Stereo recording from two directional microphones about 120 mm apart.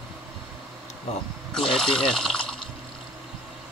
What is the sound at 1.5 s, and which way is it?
Speech, 5° left (ahead or behind).